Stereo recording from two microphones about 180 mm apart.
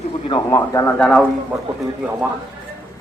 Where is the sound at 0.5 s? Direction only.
15° left (ahead or behind).